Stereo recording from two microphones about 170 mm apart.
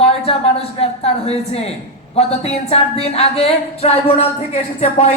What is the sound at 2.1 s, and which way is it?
A woman's voice, 40° left (ahead or behind).